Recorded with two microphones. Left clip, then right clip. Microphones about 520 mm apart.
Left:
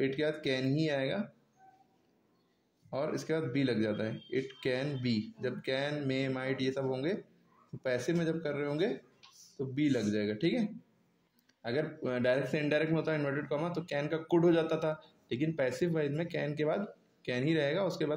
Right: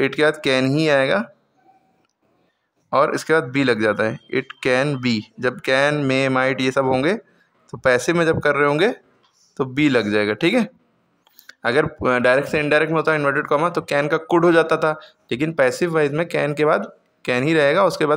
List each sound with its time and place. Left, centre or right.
0.0 s speech: left
2.9 s speech: left